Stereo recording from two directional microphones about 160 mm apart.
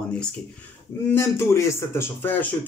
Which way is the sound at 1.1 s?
15° left (ahead or behind).